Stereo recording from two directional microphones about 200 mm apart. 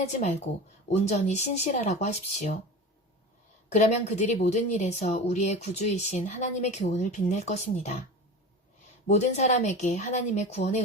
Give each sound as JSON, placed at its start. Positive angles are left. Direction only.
{"t": 0.0, "sound": "speech", "side_deg": 35}
{"t": 3.7, "sound": "speech", "side_deg": 35}
{"t": 9.0, "sound": "speech", "side_deg": 35}